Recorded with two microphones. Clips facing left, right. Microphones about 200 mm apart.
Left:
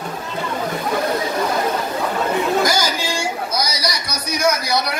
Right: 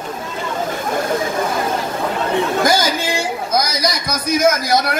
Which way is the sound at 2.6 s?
55° right (ahead or behind).